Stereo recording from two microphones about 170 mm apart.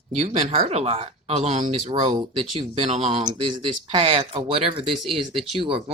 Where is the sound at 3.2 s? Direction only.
30° right (ahead or behind).